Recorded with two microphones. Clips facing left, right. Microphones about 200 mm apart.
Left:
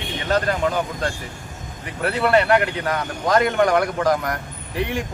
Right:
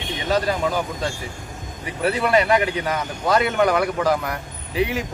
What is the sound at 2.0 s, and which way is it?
Speech, 10° right (ahead or behind).